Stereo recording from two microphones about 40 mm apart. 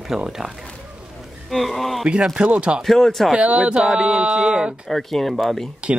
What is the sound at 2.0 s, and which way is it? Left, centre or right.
Speech, centre.